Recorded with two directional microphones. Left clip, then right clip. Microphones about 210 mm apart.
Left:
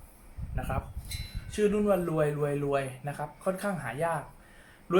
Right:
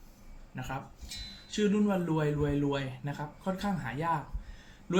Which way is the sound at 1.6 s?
20° left (ahead or behind).